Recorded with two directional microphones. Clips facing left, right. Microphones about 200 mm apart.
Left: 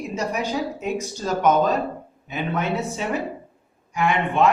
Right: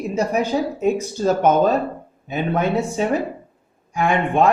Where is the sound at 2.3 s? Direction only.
40° right (ahead or behind).